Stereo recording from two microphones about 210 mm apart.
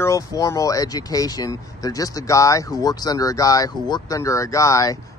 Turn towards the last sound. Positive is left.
turn(degrees=15)  # may be behind; listen again after turning